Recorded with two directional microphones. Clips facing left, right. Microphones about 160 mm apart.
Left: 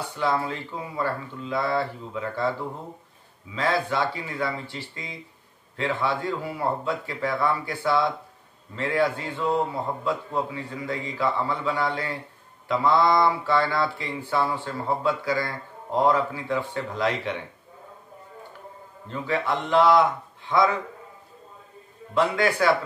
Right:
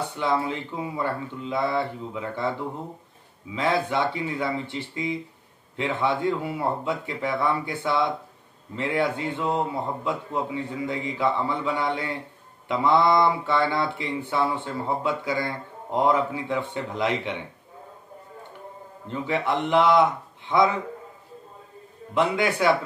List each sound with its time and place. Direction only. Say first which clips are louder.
0.2 s speech: even; 20° right (ahead or behind)
3.5 s speech: right 1 dB; 20° right (ahead or behind)
19.0 s speech: right 1 dB; 20° right (ahead or behind)
22.1 s speech: even; 20° right (ahead or behind)